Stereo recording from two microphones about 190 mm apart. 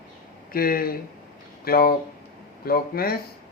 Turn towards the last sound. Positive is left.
turn(degrees=55)  # may be behind; listen again after turning